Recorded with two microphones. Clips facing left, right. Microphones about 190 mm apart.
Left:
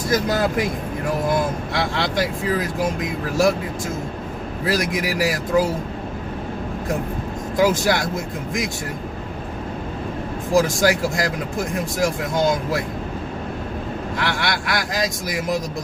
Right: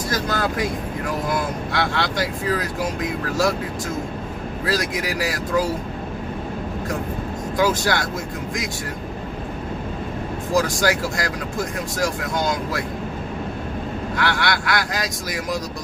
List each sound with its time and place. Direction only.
0.1 s speech: 20° left (ahead or behind)
4.6 s speech: 20° left (ahead or behind)
7.6 s speech: 20° left (ahead or behind)
10.5 s speech: 25° left (ahead or behind)
14.2 s speech: 25° left (ahead or behind)